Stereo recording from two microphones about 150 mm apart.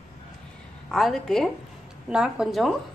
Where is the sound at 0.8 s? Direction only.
Centre (ahead or behind).